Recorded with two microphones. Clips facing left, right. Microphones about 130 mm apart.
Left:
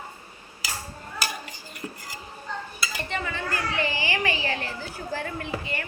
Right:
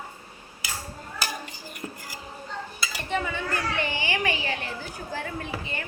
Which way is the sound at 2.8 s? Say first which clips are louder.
Right 3 dB; 5° right (ahead or behind).